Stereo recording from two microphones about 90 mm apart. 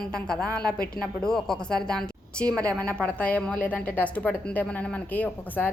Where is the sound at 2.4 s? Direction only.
40° right (ahead or behind).